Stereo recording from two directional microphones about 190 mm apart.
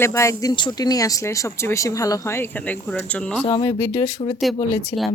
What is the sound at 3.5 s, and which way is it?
Speech, 20° left (ahead or behind).